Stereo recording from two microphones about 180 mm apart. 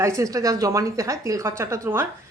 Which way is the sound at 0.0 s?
15° right (ahead or behind).